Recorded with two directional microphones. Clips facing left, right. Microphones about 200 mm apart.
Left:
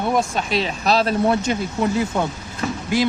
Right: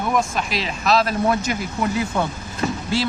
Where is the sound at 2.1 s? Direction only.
15° left (ahead or behind).